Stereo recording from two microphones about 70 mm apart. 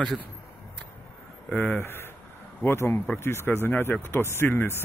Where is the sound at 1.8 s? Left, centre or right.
Left.